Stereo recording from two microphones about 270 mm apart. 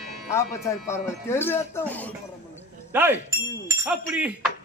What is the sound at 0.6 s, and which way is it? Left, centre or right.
Speech, centre.